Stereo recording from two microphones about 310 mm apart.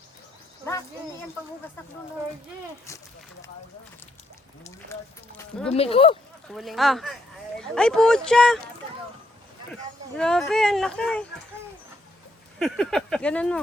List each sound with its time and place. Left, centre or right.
5.4 s speech: centre
5.7 s speech: centre
6.5 s speech: centre
10.2 s speech: centre
12.5 s speech: centre